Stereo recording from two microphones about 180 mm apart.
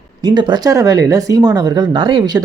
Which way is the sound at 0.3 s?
25° right (ahead or behind).